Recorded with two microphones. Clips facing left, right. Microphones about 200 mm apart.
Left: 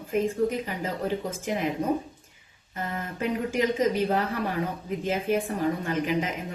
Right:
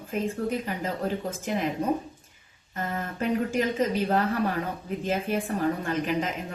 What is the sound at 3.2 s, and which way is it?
Speech, 10° left (ahead or behind).